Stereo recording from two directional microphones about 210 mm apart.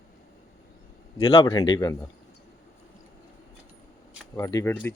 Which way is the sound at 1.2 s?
20° left (ahead or behind).